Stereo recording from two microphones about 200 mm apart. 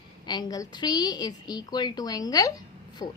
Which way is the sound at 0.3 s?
20° left (ahead or behind).